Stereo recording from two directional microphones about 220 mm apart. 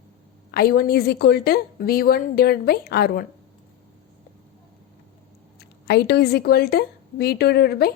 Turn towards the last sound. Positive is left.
turn(degrees=45)  # may be behind; listen again after turning